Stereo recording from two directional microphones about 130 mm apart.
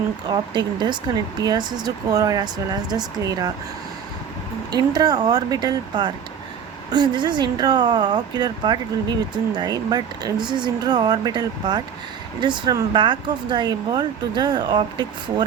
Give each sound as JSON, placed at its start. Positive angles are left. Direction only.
{"t": 0.3, "sound": "speech", "side_deg": -35}
{"t": 4.7, "sound": "speech", "side_deg": -30}